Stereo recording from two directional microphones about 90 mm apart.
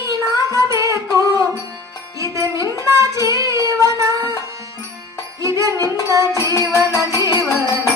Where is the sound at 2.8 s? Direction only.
35° right (ahead or behind).